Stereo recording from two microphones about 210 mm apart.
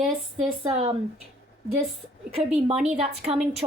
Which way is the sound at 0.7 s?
30° right (ahead or behind).